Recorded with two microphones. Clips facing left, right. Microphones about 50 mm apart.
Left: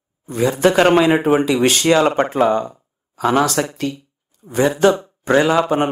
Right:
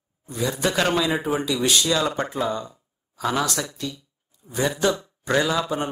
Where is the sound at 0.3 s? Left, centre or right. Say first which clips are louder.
Left 9 dB; left.